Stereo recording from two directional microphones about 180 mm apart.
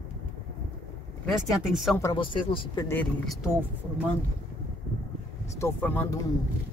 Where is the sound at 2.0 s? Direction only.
25° left (ahead or behind).